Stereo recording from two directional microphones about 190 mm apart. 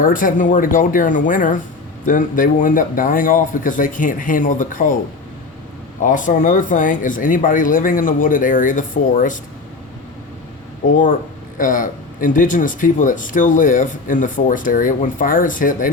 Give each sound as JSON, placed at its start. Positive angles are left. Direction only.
{"t": 0.0, "sound": "speech", "side_deg": 45}
{"t": 6.0, "sound": "speech", "side_deg": 45}
{"t": 11.5, "sound": "speech", "side_deg": 45}